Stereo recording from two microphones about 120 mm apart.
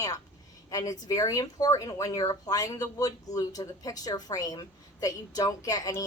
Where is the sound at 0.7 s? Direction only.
30° left (ahead or behind).